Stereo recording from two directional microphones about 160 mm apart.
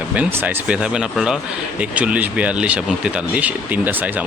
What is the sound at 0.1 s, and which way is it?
Speech, 10° right (ahead or behind).